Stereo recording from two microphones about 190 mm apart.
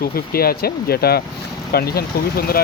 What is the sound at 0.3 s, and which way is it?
Speech, 50° left (ahead or behind).